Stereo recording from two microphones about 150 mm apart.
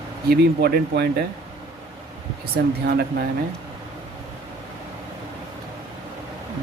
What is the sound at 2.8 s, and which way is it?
Speech, 90° right.